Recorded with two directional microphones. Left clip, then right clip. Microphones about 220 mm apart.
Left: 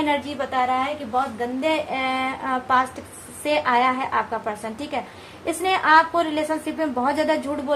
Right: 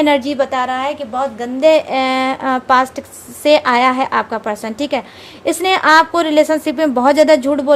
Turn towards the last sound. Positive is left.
turn(degrees=-50)  # may be behind; listen again after turning